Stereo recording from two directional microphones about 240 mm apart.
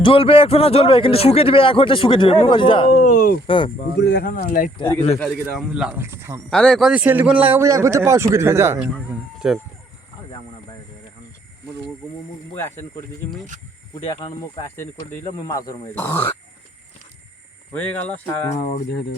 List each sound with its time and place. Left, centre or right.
0.0 s speech: left
2.9 s speech: left
3.4 s speech: left
3.9 s speech: left
4.8 s speech: left
5.2 s speech: centre
6.5 s a man's voice: centre
14.2 s speech: left
17.7 s speech: centre